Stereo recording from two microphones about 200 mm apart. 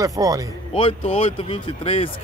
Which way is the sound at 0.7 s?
25° left (ahead or behind).